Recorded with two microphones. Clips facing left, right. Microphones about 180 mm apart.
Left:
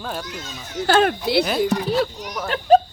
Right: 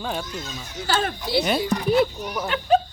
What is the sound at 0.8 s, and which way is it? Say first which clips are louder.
Speech: left 7 dB; 65° left (ahead or behind).